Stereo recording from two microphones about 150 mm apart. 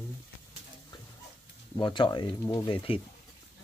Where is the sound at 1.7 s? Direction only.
30° left (ahead or behind).